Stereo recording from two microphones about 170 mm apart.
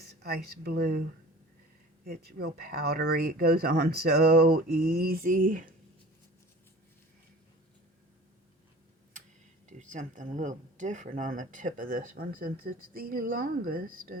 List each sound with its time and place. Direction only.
0.2 s speech: 65° right (ahead or behind)
2.0 s speech: 65° right (ahead or behind); by 5.7 s 50° right (ahead or behind)
9.6 s speech: 45° right (ahead or behind)